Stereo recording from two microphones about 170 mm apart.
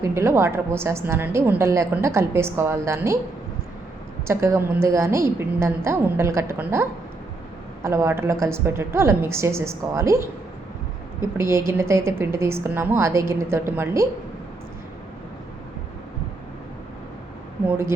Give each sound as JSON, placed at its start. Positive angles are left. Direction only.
{"t": 0.0, "sound": "a woman's voice", "side_deg": -15}
{"t": 4.3, "sound": "a woman's voice", "side_deg": -15}
{"t": 7.9, "sound": "a woman's voice", "side_deg": -15}
{"t": 11.3, "sound": "a woman's voice", "side_deg": -15}
{"t": 17.7, "sound": "a woman's voice", "side_deg": -15}